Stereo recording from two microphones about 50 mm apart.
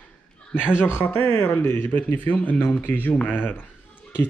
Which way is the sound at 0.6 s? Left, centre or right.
Left.